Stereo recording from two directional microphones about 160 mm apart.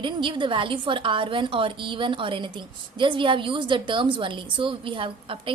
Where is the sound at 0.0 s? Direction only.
30° right (ahead or behind).